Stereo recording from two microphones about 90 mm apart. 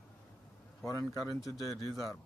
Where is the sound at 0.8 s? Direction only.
40° left (ahead or behind).